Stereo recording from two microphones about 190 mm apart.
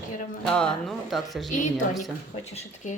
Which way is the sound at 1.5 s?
40° left (ahead or behind).